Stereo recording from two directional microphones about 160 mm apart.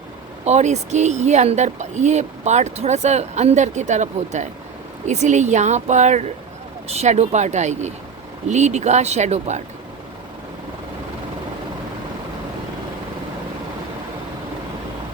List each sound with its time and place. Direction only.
0.4 s speech: 45° right (ahead or behind)